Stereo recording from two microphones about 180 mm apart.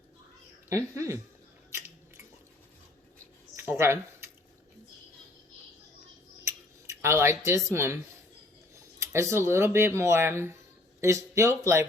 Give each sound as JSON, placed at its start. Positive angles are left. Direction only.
{"t": 0.7, "sound": "speech", "side_deg": -15}
{"t": 3.5, "sound": "a sound", "side_deg": -15}
{"t": 7.0, "sound": "speech", "side_deg": -15}
{"t": 9.0, "sound": "speech", "side_deg": -15}